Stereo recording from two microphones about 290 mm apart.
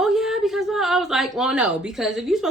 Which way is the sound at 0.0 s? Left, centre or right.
Centre.